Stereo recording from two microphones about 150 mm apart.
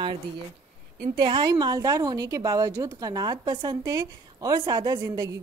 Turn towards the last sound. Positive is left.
turn(degrees=-25)  # may be behind; listen again after turning